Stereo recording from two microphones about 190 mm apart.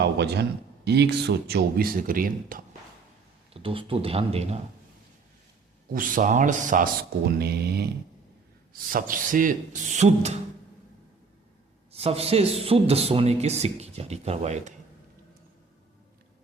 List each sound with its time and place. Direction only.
0.0 s a man's voice: 60° right (ahead or behind)
3.5 s a man's voice: 30° right (ahead or behind)
5.9 s speech: 45° right (ahead or behind)
8.9 s speech: 45° right (ahead or behind)
11.9 s a man's voice: 30° right (ahead or behind)